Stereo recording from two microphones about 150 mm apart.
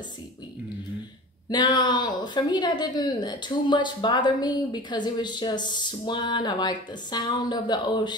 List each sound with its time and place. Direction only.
1.5 s a woman's voice: 30° left (ahead or behind)